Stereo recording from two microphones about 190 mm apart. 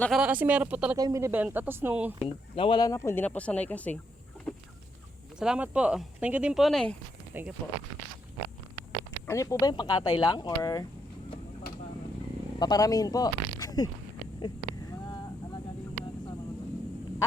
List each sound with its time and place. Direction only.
0.0 s speech: 5° right (ahead or behind)
0.9 s speech: 20° right (ahead or behind)
2.2 s speech: 25° left (ahead or behind); by 4.0 s 10° left (ahead or behind)
4.5 s chicken: 5° left (ahead or behind)
5.4 s speech: 5° right (ahead or behind)
7.3 s speech: 10° right (ahead or behind)
9.2 s speech: 15° left (ahead or behind)
12.5 s speech: 20° left (ahead or behind)
14.3 s vehicle: 25° left (ahead or behind)